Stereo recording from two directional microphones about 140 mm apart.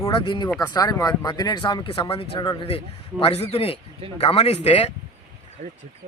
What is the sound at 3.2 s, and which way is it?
Speech, 45° left (ahead or behind).